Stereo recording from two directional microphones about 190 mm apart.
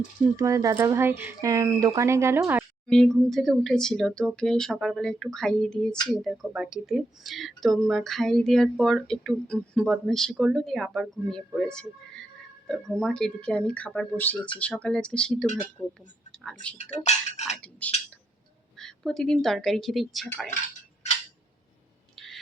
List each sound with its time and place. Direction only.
0.3 s speech: 15° right (ahead or behind)
2.8 s speech: centre (ahead or behind)
16.7 s speech: 35° left (ahead or behind)
17.6 s a sound: 10° left (ahead or behind)
18.8 s speech: centre (ahead or behind)